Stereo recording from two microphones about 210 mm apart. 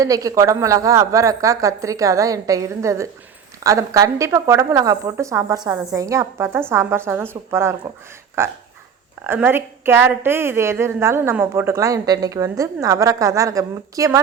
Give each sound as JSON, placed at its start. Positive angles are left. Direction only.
{"t": 0.0, "sound": "a woman's voice", "side_deg": -15}